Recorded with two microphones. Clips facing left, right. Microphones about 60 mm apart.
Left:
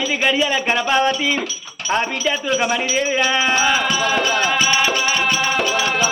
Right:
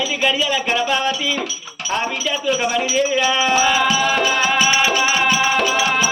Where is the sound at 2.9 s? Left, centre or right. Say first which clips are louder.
Right 1 dB; left.